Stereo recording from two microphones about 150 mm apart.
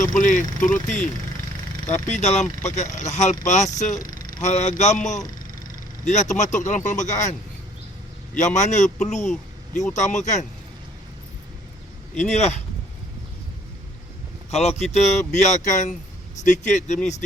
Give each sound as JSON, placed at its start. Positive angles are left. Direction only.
{"t": 0.0, "sound": "speech", "side_deg": 60}
{"t": 4.0, "sound": "vehicle", "side_deg": 65}
{"t": 4.4, "sound": "speech", "side_deg": 50}
{"t": 8.4, "sound": "speech", "side_deg": 50}
{"t": 12.3, "sound": "speech", "side_deg": 50}
{"t": 14.5, "sound": "speech", "side_deg": 45}